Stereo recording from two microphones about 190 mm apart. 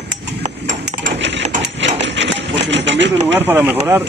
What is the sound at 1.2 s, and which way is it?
Engine, 70° right (ahead or behind).